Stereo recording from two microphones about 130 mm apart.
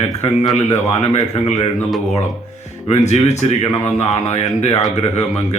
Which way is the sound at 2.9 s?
60° left (ahead or behind).